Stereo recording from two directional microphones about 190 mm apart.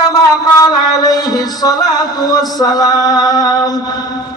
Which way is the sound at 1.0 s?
20° left (ahead or behind).